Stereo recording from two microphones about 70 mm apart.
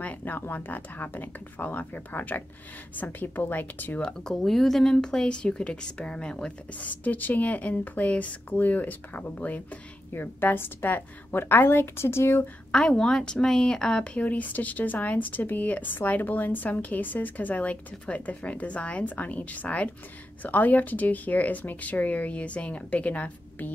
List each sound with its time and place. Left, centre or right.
0.0 s a woman's voice: left
4.0 s a woman's voice: centre; by 12.4 s left
12.7 s speech: centre
14.2 s a woman's voice: left